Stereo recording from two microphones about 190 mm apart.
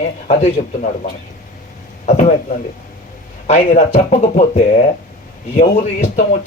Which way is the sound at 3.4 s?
35° left (ahead or behind).